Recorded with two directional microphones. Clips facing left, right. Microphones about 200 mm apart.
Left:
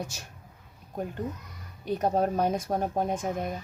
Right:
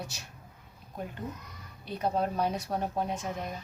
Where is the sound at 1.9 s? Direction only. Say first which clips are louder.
Left 5 dB; 45° left (ahead or behind).